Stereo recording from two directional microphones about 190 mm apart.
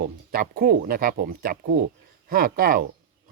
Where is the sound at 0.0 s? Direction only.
50° right (ahead or behind).